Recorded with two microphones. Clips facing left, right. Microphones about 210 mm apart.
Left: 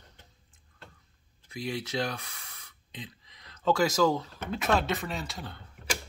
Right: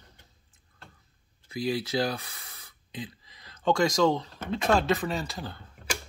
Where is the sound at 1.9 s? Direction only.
30° right (ahead or behind).